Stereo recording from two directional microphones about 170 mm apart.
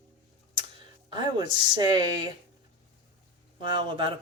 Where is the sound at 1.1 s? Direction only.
25° right (ahead or behind).